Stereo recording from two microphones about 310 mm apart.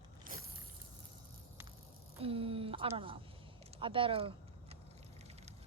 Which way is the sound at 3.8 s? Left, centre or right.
Centre.